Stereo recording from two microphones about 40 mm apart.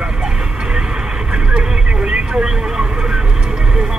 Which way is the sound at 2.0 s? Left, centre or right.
Right.